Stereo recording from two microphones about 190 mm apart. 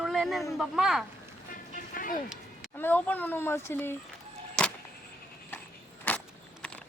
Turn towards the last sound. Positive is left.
turn(degrees=10)  # may be behind; listen again after turning